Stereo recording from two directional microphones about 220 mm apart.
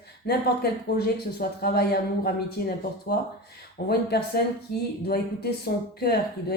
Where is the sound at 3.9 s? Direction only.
45° left (ahead or behind).